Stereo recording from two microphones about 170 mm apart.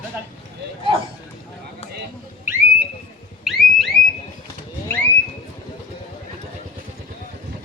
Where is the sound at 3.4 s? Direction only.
Centre (ahead or behind).